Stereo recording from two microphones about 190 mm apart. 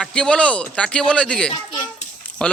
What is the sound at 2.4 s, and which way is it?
Speech, 5° left (ahead or behind).